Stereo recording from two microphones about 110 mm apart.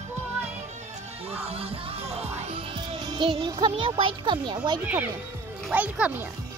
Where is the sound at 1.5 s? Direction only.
60° right (ahead or behind).